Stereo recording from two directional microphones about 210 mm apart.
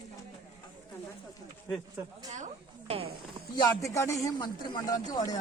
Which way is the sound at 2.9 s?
30° right (ahead or behind).